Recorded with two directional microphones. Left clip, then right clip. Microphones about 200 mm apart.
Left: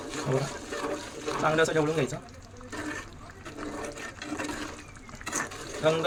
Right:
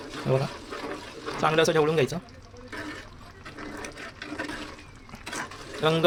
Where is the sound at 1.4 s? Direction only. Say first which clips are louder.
Right 3 dB; 50° right (ahead or behind).